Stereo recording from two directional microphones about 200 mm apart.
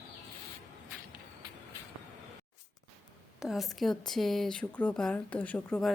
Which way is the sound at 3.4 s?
Centre (ahead or behind).